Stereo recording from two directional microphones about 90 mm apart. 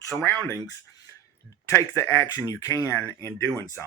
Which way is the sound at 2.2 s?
40° left (ahead or behind).